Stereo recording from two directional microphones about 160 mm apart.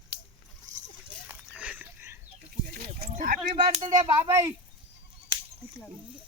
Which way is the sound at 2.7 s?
70° right (ahead or behind).